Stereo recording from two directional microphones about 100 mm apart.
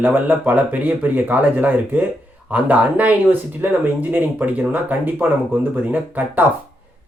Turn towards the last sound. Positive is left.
turn(degrees=-15)  # may be behind; listen again after turning